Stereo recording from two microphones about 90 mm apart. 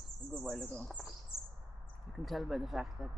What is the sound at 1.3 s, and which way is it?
Bird, 25° left (ahead or behind).